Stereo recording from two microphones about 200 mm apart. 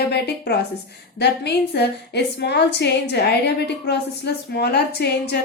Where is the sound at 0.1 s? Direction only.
55° left (ahead or behind).